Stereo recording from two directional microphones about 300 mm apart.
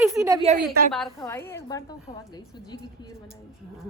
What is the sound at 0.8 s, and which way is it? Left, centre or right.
Speech, right.